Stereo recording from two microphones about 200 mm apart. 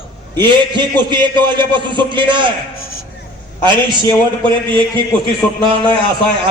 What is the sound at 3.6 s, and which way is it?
Speech, 20° right (ahead or behind).